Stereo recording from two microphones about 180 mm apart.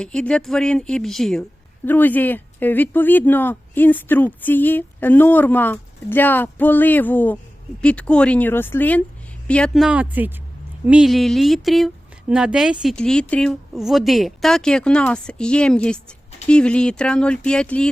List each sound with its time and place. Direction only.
0.0 s a woman's voice: 5° left (ahead or behind)